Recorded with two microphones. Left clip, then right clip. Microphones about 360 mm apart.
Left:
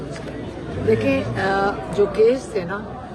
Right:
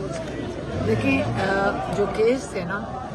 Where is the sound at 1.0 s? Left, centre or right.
Centre.